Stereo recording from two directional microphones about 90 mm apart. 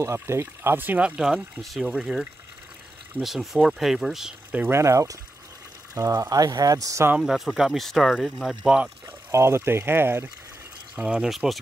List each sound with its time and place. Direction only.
0.0 s speech: 30° right (ahead or behind); by 4.3 s 5° right (ahead or behind)
4.5 s speech: 25° right (ahead or behind)
7.2 s speech: 5° right (ahead or behind)
8.6 s speech: 10° right (ahead or behind)
9.3 s speech: 30° right (ahead or behind)
11.0 s speech: 10° right (ahead or behind)